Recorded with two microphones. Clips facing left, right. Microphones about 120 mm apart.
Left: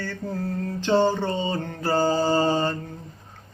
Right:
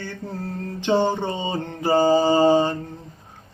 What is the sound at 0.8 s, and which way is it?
Mantra, 15° right (ahead or behind).